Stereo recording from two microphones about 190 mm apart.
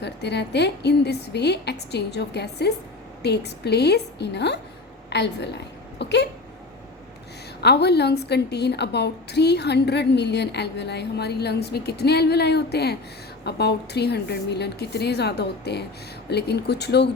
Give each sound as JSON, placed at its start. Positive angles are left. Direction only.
{"t": 0.0, "sound": "a woman's voice", "side_deg": 65}
{"t": 7.6, "sound": "a woman's voice", "side_deg": 60}